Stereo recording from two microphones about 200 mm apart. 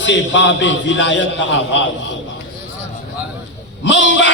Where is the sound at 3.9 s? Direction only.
65° left (ahead or behind).